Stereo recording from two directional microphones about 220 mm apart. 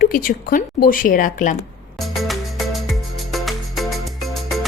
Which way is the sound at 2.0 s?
Centre (ahead or behind).